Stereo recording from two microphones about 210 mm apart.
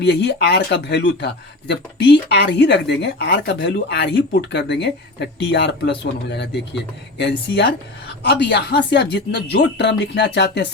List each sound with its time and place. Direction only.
0.0 s speech: 55° left (ahead or behind)